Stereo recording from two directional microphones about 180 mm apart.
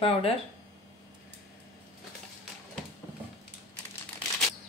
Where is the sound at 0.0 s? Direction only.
30° left (ahead or behind).